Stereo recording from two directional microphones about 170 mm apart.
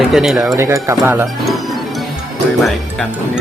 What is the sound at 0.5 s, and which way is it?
Speech, 15° right (ahead or behind).